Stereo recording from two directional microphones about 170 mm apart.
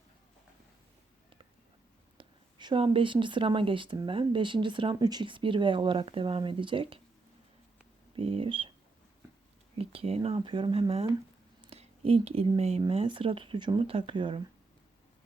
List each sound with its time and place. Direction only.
2.1 s speech: 30° right (ahead or behind)
8.1 s speech: 35° right (ahead or behind)
9.7 s speech: 35° right (ahead or behind)